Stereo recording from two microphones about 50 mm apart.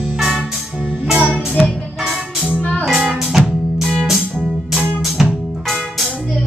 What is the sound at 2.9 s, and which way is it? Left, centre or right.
Music, centre.